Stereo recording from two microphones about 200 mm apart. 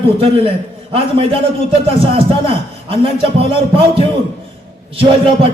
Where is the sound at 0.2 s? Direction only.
30° right (ahead or behind).